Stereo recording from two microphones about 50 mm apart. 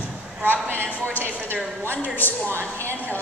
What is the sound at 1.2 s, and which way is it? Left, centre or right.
Speech, right.